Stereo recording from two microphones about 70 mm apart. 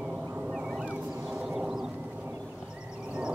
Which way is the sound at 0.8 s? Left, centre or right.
Centre.